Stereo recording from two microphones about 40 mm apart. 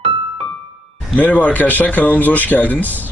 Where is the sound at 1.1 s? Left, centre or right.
Left.